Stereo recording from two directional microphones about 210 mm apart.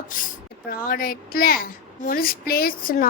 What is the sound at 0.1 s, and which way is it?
A child's voice, 40° left (ahead or behind).